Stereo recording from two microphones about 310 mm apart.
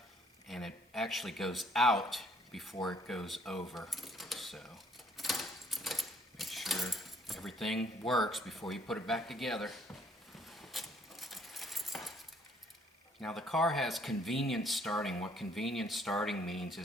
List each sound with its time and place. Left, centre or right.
0.4 s speech: centre
3.7 s keys jangling: centre
13.2 s speech: centre